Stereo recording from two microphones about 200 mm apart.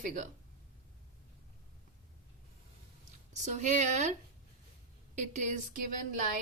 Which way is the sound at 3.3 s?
35° right (ahead or behind).